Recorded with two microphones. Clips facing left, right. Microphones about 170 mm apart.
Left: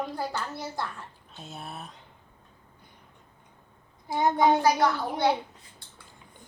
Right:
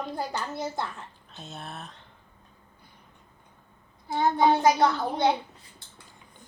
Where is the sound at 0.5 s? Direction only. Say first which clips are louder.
Right 3 dB; 20° right (ahead or behind).